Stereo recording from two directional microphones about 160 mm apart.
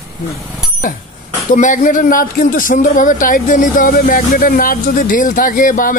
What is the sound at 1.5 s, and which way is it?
Speech, 50° left (ahead or behind).